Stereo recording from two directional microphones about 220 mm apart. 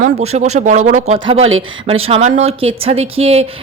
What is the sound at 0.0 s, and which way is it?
Speech, 30° right (ahead or behind).